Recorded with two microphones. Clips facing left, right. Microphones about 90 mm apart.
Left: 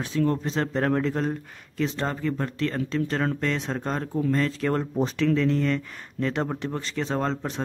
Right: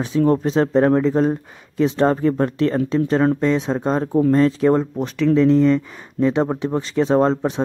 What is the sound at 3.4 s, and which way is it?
Speech, 10° right (ahead or behind).